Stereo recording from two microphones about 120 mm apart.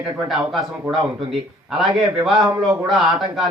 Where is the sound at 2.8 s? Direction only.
5° right (ahead or behind).